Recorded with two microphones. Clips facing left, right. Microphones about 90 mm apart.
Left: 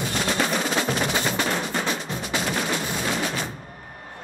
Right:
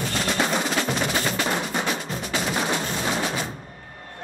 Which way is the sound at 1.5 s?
10° right (ahead or behind).